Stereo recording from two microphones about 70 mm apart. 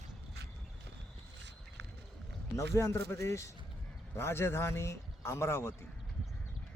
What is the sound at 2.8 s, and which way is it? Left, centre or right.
A man's voice, left.